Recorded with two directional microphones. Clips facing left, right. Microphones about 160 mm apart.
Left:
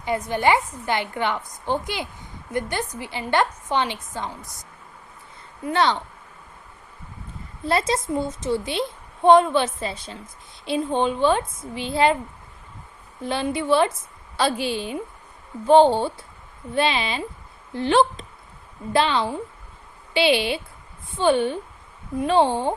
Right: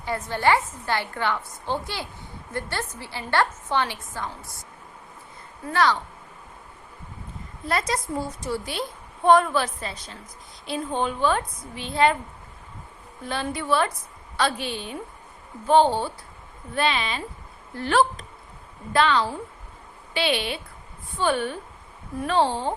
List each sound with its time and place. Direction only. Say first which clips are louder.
0.0 s a woman's voice: left 2 dB; 15° left (ahead or behind)
5.6 s a woman's voice: left 1 dB; 25° left (ahead or behind)
7.6 s a woman's voice: left 4 dB; 30° left (ahead or behind)
13.2 s a woman's voice: left 5 dB; 30° left (ahead or behind)